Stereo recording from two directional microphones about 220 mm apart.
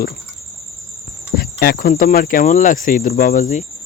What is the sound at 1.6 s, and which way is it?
Cricket, 45° left (ahead or behind).